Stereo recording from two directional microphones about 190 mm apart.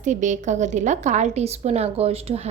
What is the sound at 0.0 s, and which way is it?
A woman's voice, 40° right (ahead or behind).